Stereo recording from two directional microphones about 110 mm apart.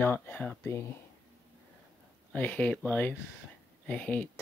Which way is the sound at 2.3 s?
15° left (ahead or behind).